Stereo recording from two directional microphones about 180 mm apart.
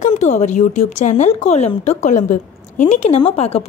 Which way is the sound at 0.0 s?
40° left (ahead or behind).